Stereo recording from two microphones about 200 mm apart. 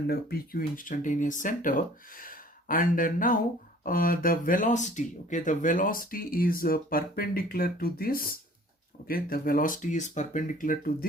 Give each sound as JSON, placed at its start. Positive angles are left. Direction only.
{"t": 0.1, "sound": "speech", "side_deg": 50}